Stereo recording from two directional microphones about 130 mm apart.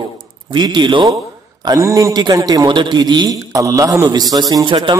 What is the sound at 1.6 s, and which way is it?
A man's voice, 25° right (ahead or behind).